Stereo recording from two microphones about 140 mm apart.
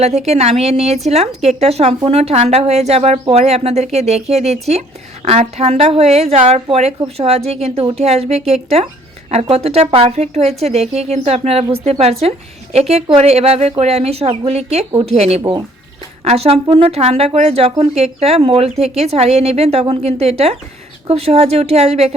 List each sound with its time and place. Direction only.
0.0 s a woman's voice: 50° right (ahead or behind)